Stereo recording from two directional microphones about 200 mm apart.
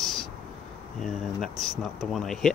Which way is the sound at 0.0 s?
Centre (ahead or behind).